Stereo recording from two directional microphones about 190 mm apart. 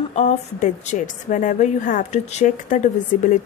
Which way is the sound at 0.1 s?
35° left (ahead or behind).